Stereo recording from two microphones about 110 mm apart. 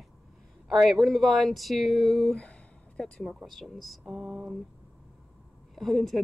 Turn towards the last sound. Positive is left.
turn(degrees=0)  # may be behind; listen again after turning